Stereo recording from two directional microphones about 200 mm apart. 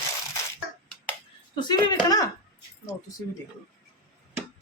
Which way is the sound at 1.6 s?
20° left (ahead or behind).